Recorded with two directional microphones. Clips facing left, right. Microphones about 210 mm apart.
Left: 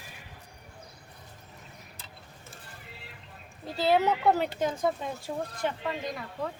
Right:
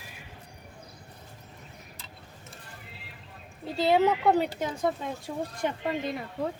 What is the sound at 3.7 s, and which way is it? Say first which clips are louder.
Speech: right 2 dB; centre (ahead or behind).